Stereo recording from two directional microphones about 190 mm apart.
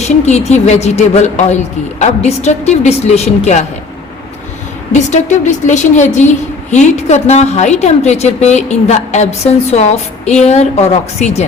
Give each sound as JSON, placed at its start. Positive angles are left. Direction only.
{"t": 0.0, "sound": "a woman's voice", "side_deg": 35}
{"t": 4.9, "sound": "a woman's voice", "side_deg": 40}